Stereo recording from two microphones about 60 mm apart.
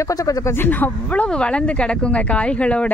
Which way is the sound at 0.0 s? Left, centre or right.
Left.